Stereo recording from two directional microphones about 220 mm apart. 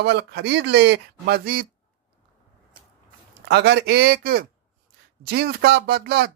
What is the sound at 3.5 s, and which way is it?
Speech, 50° right (ahead or behind).